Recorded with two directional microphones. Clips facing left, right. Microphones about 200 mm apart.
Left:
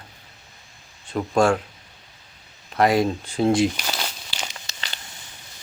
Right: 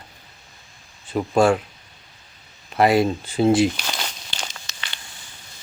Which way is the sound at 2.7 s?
5° right (ahead or behind).